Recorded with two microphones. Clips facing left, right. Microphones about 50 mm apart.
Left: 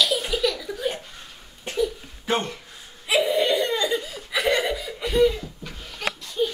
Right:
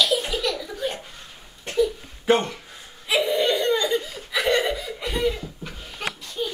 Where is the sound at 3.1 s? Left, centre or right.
Centre.